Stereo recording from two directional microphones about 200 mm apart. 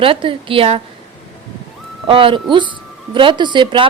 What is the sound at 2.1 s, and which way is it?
Speech, 25° right (ahead or behind).